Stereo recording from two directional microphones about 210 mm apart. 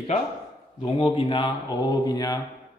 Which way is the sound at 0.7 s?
20° left (ahead or behind).